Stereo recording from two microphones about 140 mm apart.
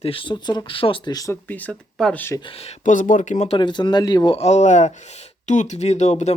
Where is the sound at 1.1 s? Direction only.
25° left (ahead or behind).